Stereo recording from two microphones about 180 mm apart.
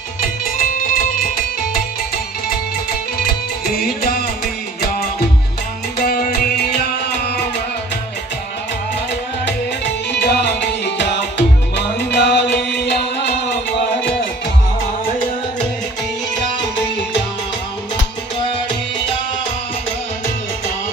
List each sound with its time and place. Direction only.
0.2 s music: 50° left (ahead or behind)
6.0 s music: 50° left (ahead or behind)
10.1 s music: 70° left (ahead or behind)